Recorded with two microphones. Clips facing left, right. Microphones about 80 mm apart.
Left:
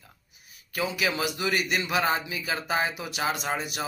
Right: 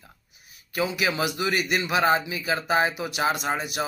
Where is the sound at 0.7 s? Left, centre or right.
Centre.